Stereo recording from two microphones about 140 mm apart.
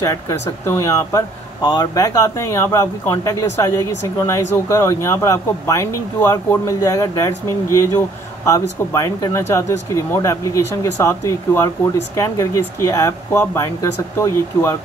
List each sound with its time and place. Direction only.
0.0 s speech: 25° left (ahead or behind)